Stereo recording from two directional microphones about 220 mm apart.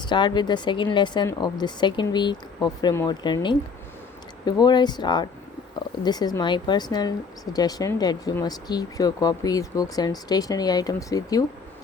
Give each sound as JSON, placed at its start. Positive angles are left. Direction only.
{"t": 0.0, "sound": "speech", "side_deg": 20}